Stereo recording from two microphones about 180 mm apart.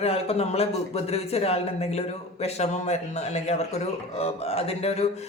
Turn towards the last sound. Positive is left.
turn(degrees=35)  # may be behind; listen again after turning